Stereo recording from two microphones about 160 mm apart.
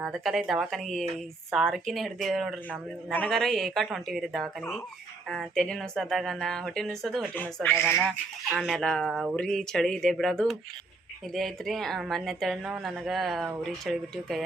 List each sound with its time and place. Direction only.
0.0 s a woman's voice: centre (ahead or behind)
7.3 s speech: 10° left (ahead or behind)
7.9 s a woman's voice: centre (ahead or behind)